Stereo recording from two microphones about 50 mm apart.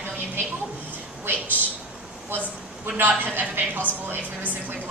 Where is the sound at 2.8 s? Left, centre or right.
Right.